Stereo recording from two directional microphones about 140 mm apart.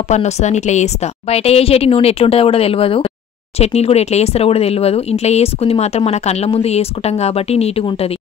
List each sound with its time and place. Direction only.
0.1 s a woman's voice: 55° left (ahead or behind)